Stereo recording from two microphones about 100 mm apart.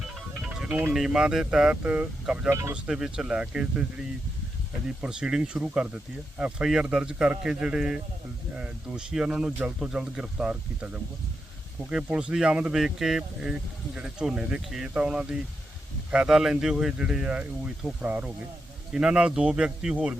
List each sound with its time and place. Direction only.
0.3 s music: 5° right (ahead or behind)
0.9 s speech: 5° right (ahead or behind)
2.5 s speech: 25° right (ahead or behind)
2.7 s speech: 10° right (ahead or behind)